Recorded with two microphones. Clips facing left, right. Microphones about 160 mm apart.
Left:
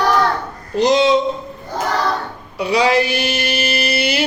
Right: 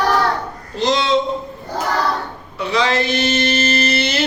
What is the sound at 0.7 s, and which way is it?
Speech, 15° left (ahead or behind).